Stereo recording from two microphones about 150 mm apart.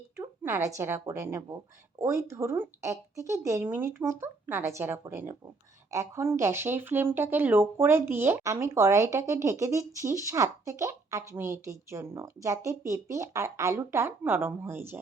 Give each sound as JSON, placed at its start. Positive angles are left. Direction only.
{"t": 0.2, "sound": "speech", "side_deg": -15}